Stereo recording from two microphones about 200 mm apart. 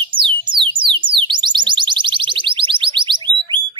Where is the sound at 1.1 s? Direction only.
25° right (ahead or behind).